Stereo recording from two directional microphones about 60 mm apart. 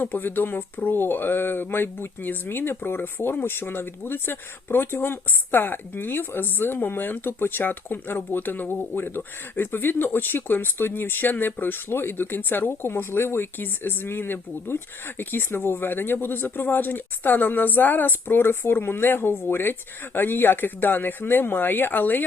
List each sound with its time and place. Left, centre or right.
0.0 s speech: left